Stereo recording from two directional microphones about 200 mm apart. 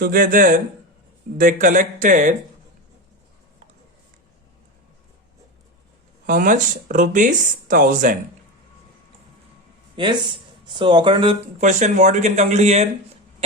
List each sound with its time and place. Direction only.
0.0 s speech: 45° right (ahead or behind)
6.2 s speech: 40° right (ahead or behind)
9.9 s speech: 25° right (ahead or behind)